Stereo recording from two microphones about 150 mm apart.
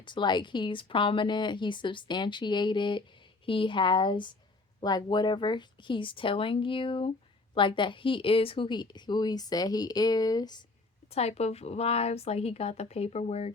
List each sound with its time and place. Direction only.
0.0 s a woman's voice: 30° left (ahead or behind)
11.1 s speech: 45° left (ahead or behind)